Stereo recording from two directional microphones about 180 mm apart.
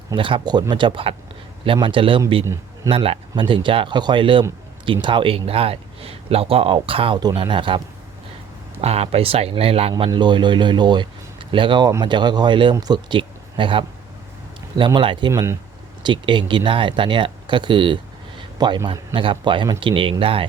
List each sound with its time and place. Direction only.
0.1 s a man's voice: 30° right (ahead or behind)
8.8 s speech: 35° right (ahead or behind)
9.9 s a man's voice: 25° right (ahead or behind)
15.3 s speech: 15° right (ahead or behind)
16.0 s a man's voice: 25° right (ahead or behind)